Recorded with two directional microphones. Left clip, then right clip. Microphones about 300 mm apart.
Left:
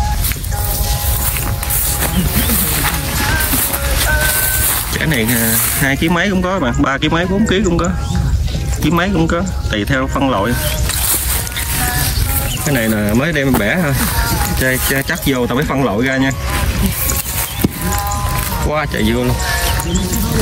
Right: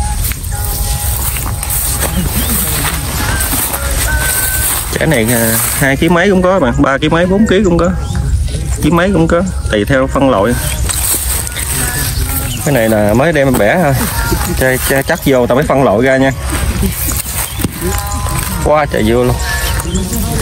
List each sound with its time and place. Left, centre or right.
4.9 s speech: centre
12.6 s speech: centre
18.7 s speech: centre
19.4 s a sound: left